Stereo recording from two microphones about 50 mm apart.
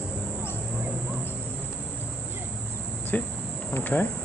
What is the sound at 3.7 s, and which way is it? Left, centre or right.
Cricket, left.